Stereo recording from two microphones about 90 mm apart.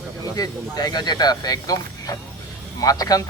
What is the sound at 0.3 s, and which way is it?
Speech, 45° left (ahead or behind).